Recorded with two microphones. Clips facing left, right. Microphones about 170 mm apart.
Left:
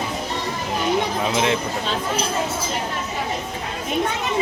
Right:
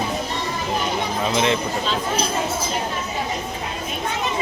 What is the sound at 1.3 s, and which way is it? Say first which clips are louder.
Speech: right 1 dB; 5° left (ahead or behind).